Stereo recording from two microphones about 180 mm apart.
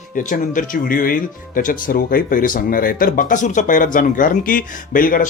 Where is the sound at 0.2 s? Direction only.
45° left (ahead or behind).